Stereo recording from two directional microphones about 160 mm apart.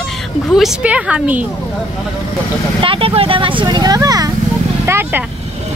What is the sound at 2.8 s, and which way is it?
Speech, 35° right (ahead or behind).